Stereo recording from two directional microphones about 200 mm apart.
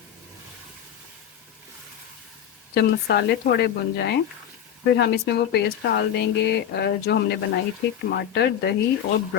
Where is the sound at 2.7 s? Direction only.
55° left (ahead or behind).